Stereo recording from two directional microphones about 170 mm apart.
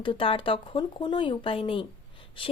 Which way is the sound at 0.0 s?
30° left (ahead or behind).